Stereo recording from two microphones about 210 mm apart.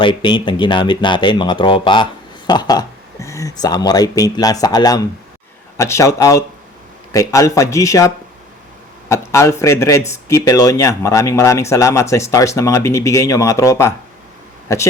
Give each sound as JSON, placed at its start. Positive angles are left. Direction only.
{"t": 0.0, "sound": "speech", "side_deg": 20}